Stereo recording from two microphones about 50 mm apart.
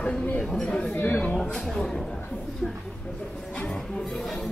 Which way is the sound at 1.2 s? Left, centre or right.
Centre.